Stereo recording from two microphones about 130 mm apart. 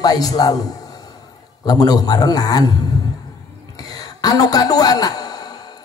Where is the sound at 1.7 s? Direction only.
30° left (ahead or behind).